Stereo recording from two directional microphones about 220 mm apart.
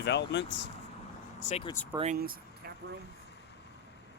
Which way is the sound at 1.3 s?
30° left (ahead or behind).